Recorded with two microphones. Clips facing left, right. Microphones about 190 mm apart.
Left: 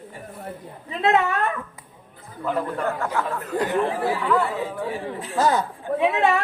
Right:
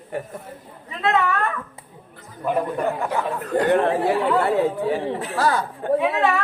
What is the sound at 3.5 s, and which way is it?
Speech, 65° right (ahead or behind).